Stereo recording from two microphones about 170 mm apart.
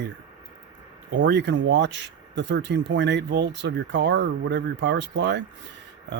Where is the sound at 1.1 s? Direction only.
90° right.